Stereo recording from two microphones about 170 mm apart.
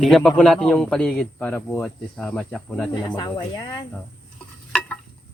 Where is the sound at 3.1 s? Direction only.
25° left (ahead or behind).